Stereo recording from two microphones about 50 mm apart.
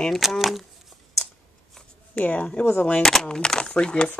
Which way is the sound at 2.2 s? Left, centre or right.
Left.